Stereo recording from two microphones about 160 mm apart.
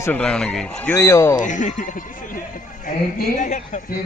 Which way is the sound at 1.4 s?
50° left (ahead or behind).